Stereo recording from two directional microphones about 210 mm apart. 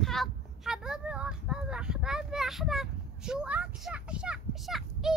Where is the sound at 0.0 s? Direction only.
Centre (ahead or behind).